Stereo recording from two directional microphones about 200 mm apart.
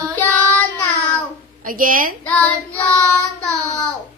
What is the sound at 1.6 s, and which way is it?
Speech, 45° right (ahead or behind).